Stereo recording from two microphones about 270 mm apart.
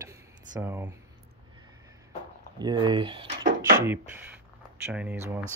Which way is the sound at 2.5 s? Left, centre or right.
Centre.